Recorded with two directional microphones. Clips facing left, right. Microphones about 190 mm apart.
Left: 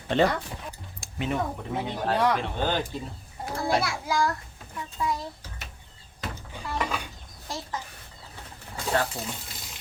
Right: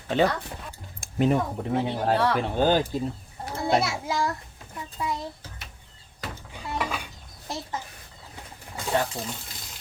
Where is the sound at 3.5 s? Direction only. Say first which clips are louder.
Right 2 dB; 25° right (ahead or behind).